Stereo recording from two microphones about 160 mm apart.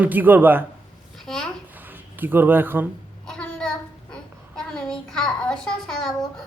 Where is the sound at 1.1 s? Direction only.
5° left (ahead or behind).